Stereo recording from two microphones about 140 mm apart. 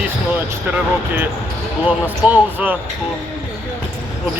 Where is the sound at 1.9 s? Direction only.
10° right (ahead or behind).